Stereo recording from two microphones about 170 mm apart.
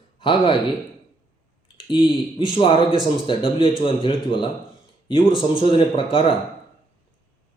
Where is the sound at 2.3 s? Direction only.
30° left (ahead or behind).